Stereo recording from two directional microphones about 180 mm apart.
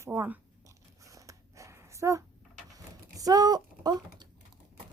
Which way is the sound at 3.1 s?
20° right (ahead or behind).